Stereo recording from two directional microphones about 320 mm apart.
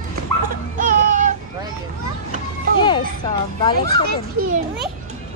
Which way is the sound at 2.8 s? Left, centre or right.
Centre.